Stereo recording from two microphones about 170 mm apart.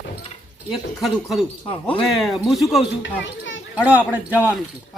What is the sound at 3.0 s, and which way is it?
Speech, 90° left.